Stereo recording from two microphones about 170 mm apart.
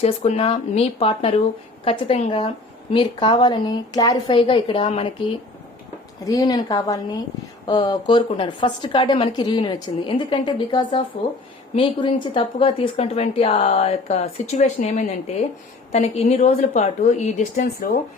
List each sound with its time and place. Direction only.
0.0 s a woman's voice: 40° left (ahead or behind)
6.2 s a woman's voice: 20° left (ahead or behind); by 18.0 s 50° left (ahead or behind)